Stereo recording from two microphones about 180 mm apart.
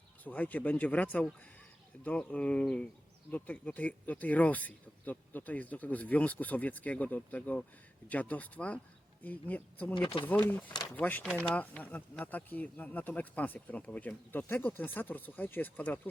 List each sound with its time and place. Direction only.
0.3 s speech: 10° left (ahead or behind)
9.9 s speech: 30° left (ahead or behind)
10.2 s speech: 10° left (ahead or behind)